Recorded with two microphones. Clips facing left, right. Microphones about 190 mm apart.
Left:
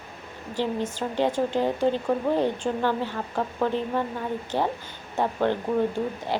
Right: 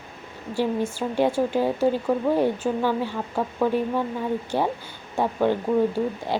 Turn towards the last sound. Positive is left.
turn(degrees=-10)  # may be behind; listen again after turning